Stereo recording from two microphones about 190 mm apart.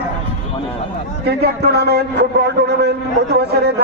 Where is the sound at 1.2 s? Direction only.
60° right (ahead or behind).